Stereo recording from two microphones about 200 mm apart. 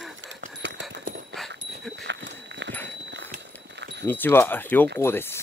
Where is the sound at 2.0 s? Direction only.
60° right (ahead or behind).